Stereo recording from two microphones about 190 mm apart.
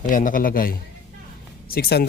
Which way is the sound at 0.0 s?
45° left (ahead or behind).